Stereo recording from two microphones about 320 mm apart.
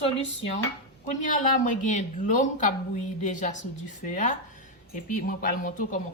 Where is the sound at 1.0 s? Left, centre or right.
Left.